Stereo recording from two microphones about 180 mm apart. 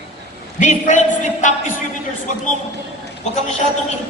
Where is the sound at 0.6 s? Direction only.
40° left (ahead or behind).